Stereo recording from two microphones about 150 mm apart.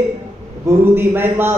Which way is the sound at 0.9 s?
15° right (ahead or behind).